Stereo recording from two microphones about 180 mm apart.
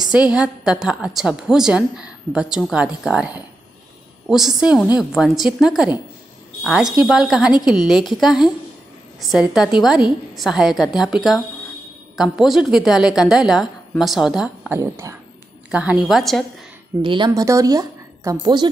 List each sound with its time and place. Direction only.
0.0 s a woman's voice: 5° right (ahead or behind)
14.8 s speech: 15° right (ahead or behind)
15.7 s a woman's voice: 5° right (ahead or behind)
17.0 s speech: 25° right (ahead or behind)